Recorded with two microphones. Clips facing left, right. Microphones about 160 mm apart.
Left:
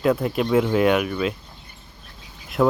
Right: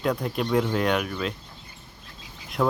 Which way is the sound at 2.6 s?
5° left (ahead or behind).